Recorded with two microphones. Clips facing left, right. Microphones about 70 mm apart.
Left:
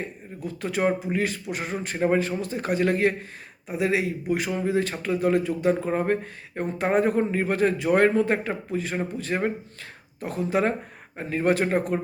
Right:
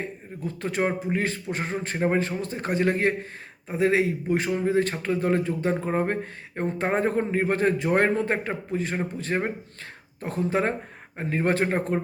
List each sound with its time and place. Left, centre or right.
0.4 s a man's voice: right
3.7 s a man's voice: right